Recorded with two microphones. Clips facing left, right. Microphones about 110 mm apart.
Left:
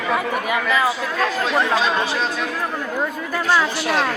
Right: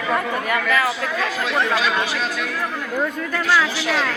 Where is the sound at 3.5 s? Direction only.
20° left (ahead or behind).